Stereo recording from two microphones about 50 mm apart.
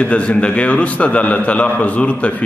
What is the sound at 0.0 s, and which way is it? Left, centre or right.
A man's voice, left.